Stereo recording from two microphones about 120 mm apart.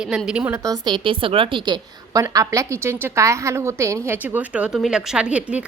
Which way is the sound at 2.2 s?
25° right (ahead or behind).